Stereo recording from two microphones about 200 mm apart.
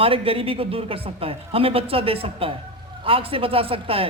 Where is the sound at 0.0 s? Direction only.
25° right (ahead or behind).